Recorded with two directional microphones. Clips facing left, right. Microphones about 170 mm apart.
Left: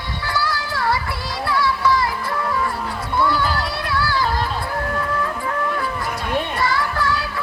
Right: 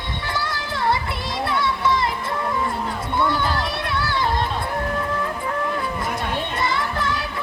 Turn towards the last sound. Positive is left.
turn(degrees=-20)  # may be behind; listen again after turning